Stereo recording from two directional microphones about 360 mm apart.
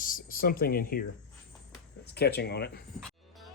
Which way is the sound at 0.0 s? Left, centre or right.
Left.